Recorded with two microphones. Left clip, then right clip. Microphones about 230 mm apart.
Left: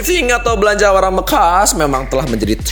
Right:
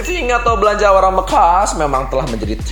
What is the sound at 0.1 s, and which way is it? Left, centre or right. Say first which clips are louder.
Speech: left 1 dB; left.